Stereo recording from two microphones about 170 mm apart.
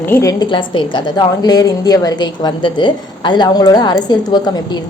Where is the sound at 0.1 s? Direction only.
20° left (ahead or behind).